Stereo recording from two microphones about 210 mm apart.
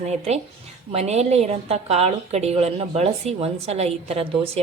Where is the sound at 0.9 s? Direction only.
30° right (ahead or behind).